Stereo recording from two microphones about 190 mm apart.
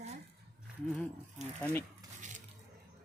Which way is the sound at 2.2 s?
40° right (ahead or behind).